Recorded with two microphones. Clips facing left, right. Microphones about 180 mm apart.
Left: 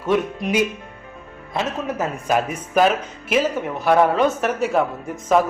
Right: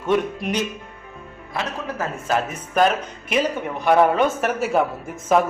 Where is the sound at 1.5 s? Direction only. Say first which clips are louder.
Left 3 dB; 20° left (ahead or behind).